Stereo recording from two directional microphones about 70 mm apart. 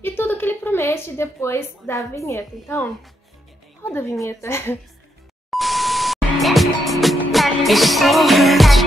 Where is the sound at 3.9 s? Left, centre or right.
Left.